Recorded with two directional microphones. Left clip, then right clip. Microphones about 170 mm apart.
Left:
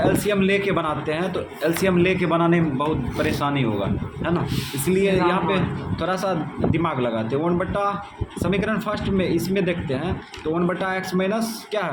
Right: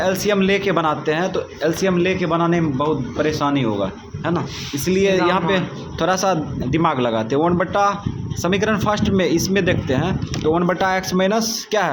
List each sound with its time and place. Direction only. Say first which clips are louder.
0.0 s a man's voice: right 2 dB; 30° right (ahead or behind)
4.9 s a man's voice: right 3 dB; 30° right (ahead or behind)